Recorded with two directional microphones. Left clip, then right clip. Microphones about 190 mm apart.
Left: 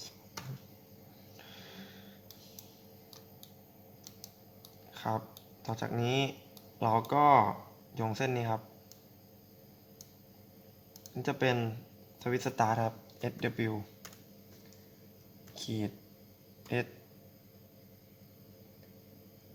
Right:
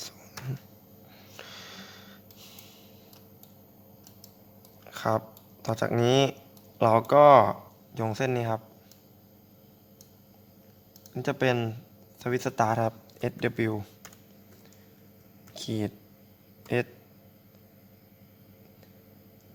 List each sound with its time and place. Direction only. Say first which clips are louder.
1.4 s snort: right 8 dB; 50° right (ahead or behind)
4.9 s a sound: right 8 dB; 45° right (ahead or behind)
5.6 s speech: right 10 dB; 45° right (ahead or behind)
11.1 s speech: right 5 dB; 45° right (ahead or behind)
15.5 s speech: right 6 dB; 45° right (ahead or behind)